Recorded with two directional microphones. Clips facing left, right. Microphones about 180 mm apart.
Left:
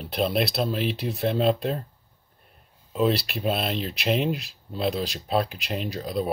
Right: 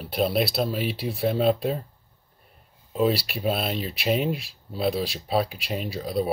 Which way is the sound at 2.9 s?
5° right (ahead or behind).